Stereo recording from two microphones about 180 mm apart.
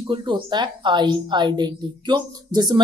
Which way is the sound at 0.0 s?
25° right (ahead or behind).